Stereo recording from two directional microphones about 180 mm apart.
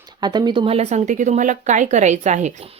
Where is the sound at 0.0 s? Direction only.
25° right (ahead or behind).